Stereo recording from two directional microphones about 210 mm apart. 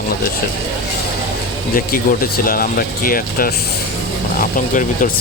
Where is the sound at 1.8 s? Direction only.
45° left (ahead or behind).